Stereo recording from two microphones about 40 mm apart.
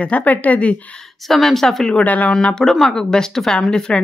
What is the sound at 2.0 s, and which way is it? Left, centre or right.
Speech, left.